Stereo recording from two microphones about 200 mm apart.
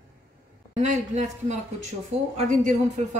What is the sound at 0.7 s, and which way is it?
A woman's voice, 35° right (ahead or behind).